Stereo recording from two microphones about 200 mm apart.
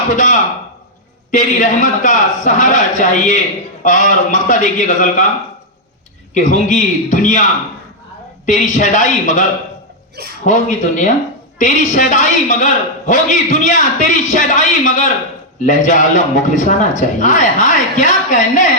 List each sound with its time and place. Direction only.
1.3 s a man's voice: 40° left (ahead or behind)
6.3 s a man's voice: 40° left (ahead or behind)
8.4 s a man's voice: 40° left (ahead or behind)
10.4 s a man's voice: 40° left (ahead or behind)